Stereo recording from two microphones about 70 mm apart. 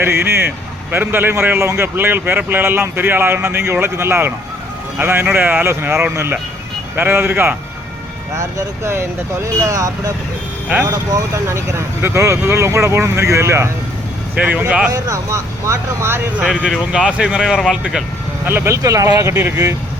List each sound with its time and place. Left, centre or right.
0.0 s speech: right
6.9 s speech: right
8.4 s speech: right
11.4 s speech: right
14.3 s speech: centre
14.9 s speech: right
16.9 s speech: centre
18.4 s speech: right